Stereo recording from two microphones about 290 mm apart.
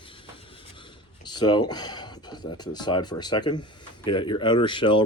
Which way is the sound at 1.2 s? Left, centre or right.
Centre.